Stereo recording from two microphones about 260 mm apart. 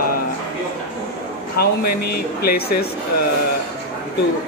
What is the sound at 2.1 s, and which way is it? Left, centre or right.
Speech, left.